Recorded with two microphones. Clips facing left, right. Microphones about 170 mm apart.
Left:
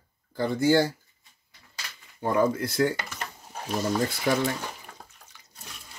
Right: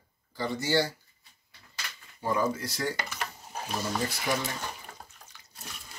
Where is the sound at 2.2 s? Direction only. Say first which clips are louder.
Left 5 dB; 55° left (ahead or behind).